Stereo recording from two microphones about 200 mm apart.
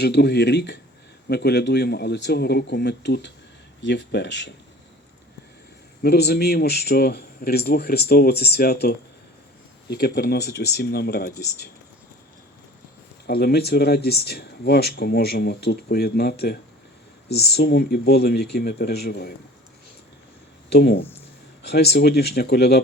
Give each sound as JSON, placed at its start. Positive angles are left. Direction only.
{"t": 0.0, "sound": "speech", "side_deg": 55}
{"t": 6.0, "sound": "a man's voice", "side_deg": 55}
{"t": 13.2, "sound": "speech", "side_deg": 55}
{"t": 20.7, "sound": "speech", "side_deg": 55}